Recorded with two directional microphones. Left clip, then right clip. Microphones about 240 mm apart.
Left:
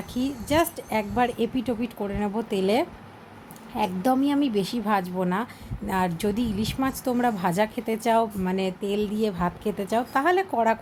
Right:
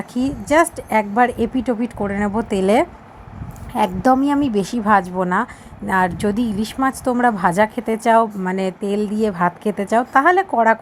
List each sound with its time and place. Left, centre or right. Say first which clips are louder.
0.1 s a woman's voice: right 8 dB; centre
3.8 s a woman's voice: right 8 dB; centre